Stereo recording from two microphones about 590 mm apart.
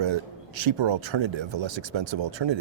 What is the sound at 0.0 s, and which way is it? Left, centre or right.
Speech, right.